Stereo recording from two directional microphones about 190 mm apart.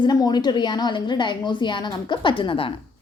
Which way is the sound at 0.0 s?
20° left (ahead or behind).